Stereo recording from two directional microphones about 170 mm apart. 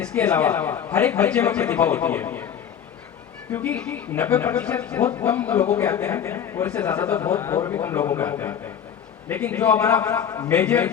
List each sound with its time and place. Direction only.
0.0 s speech: 10° left (ahead or behind)
3.5 s speech: 10° left (ahead or behind)